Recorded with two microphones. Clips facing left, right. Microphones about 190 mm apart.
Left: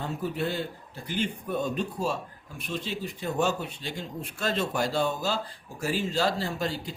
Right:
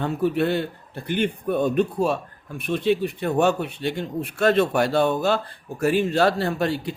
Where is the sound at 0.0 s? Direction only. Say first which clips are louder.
Right 8 dB; 65° right (ahead or behind).